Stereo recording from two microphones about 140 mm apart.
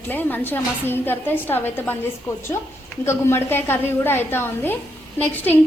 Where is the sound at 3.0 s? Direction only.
20° left (ahead or behind).